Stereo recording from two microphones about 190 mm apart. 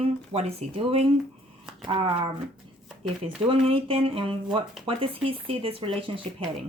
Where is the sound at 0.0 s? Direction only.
30° right (ahead or behind).